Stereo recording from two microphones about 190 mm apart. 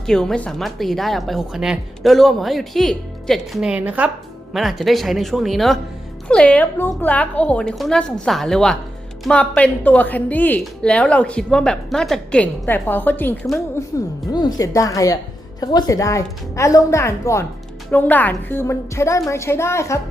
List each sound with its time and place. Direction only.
0.0 s a woman's voice: 5° left (ahead or behind)
14.3 s a woman's voice: 20° left (ahead or behind)